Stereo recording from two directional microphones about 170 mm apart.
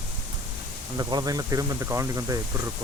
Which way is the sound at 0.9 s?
20° right (ahead or behind).